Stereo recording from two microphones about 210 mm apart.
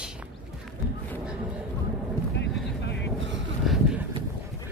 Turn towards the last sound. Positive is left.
turn(degrees=0)  # may be behind; listen again after turning